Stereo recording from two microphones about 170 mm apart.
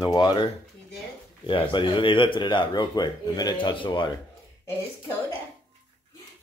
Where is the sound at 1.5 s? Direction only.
30° left (ahead or behind).